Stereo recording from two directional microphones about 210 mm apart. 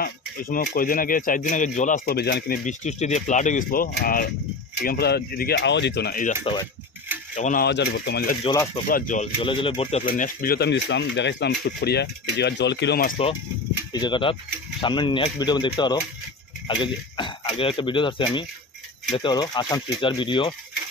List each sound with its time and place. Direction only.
0.0 s speech: 45° left (ahead or behind)
6.4 s speech: 20° left (ahead or behind)
7.3 s speech: 35° left (ahead or behind)
7.6 s speech: 55° left (ahead or behind); by 9.3 s 35° left (ahead or behind)
9.4 s speech: 25° left (ahead or behind); by 13.1 s 50° left (ahead or behind)
13.9 s speech: 20° left (ahead or behind)